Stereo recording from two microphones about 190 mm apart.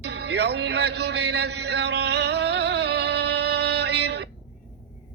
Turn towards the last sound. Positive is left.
turn(degrees=-65)  # may be behind; listen again after turning